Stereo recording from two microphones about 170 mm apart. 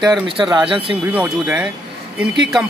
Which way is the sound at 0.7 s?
30° right (ahead or behind).